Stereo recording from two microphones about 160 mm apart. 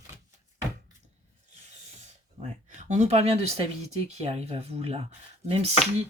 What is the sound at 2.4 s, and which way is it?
Speech, 45° right (ahead or behind).